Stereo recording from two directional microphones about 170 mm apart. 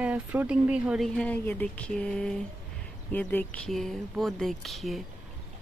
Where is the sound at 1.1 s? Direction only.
10° left (ahead or behind).